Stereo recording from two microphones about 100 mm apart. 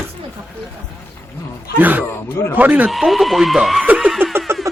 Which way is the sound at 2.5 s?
15° right (ahead or behind).